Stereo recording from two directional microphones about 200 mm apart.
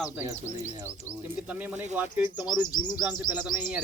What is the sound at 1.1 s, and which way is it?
Speech, 15° right (ahead or behind).